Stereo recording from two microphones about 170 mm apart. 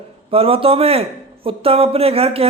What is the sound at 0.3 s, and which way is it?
A man's voice, 35° right (ahead or behind).